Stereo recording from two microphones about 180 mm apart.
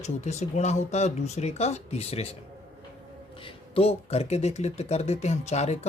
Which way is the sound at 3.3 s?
30° left (ahead or behind).